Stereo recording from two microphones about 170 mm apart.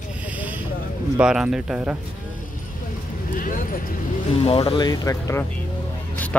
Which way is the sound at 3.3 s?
55° left (ahead or behind).